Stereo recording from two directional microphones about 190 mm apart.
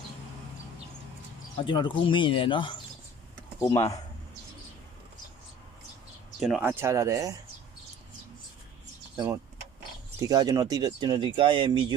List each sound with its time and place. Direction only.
1.7 s speech: 25° left (ahead or behind)
3.5 s speech: 15° left (ahead or behind)
6.4 s speech: 5° right (ahead or behind)
9.1 s speech: 15° right (ahead or behind)